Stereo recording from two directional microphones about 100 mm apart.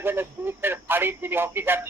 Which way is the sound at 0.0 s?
20° right (ahead or behind).